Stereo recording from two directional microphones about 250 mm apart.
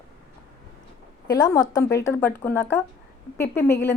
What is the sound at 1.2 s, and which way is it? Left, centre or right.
A woman's voice, centre.